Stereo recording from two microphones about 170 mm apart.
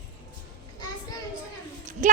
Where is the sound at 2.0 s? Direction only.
50° right (ahead or behind).